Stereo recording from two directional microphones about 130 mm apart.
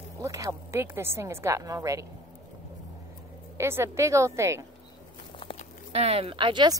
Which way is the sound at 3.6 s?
20° right (ahead or behind).